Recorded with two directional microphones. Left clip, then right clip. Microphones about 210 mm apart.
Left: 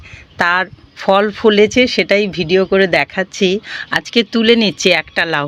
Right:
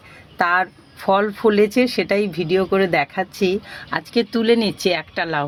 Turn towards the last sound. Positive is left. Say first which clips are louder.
# left 6 dB
turn(degrees=30)  # may be behind; listen again after turning